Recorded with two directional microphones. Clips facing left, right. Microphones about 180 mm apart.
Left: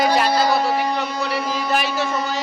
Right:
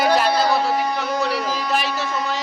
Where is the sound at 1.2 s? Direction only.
Centre (ahead or behind).